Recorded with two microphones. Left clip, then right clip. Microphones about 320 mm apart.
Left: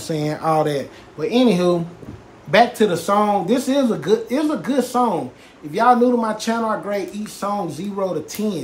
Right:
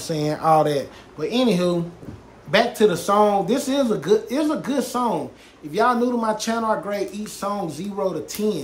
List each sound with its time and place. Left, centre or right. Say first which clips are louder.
0.0 s speech: even; centre